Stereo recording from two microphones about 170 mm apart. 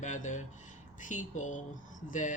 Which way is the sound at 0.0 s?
45° left (ahead or behind).